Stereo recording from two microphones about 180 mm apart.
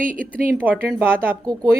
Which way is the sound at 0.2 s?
50° right (ahead or behind).